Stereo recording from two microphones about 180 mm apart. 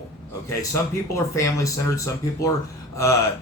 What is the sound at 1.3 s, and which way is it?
Speech, 15° left (ahead or behind).